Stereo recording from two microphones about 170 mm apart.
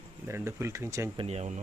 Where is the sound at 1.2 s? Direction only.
40° right (ahead or behind).